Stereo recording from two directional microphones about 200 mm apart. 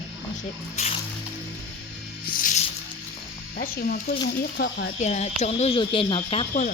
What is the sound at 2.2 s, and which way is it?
Music, 40° left (ahead or behind).